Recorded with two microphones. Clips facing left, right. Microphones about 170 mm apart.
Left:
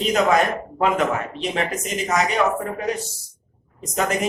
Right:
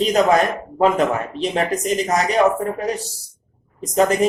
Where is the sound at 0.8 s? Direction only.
35° right (ahead or behind).